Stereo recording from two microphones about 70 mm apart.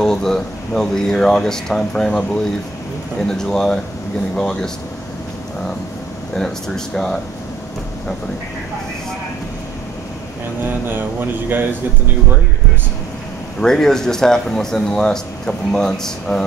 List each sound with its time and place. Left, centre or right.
0.0 s speech: centre
3.3 s speech: centre
6.3 s speech: centre
10.6 s speech: right
13.6 s speech: centre